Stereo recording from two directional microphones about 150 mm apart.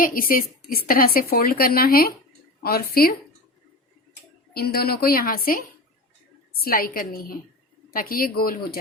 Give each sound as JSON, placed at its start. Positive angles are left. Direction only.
{"t": 0.0, "sound": "a woman's voice", "side_deg": 70}
{"t": 4.5, "sound": "a woman's voice", "side_deg": 90}
{"t": 6.7, "sound": "a woman's voice", "side_deg": 75}